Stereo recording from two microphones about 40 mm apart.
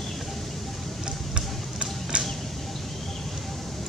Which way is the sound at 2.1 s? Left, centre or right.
Right.